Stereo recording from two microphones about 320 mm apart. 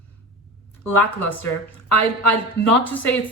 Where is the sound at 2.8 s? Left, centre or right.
Centre.